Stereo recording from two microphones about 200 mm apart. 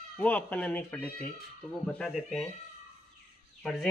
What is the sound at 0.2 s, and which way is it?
Speech, 10° left (ahead or behind).